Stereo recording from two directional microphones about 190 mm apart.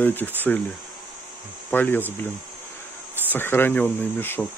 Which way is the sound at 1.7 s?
10° left (ahead or behind).